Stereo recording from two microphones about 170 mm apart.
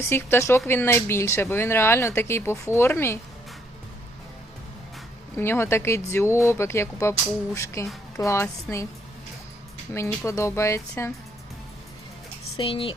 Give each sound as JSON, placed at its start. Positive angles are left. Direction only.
{"t": 0.1, "sound": "speech", "side_deg": 15}
{"t": 5.4, "sound": "speech", "side_deg": 15}
{"t": 9.9, "sound": "speech", "side_deg": 15}
{"t": 12.5, "sound": "speech", "side_deg": 30}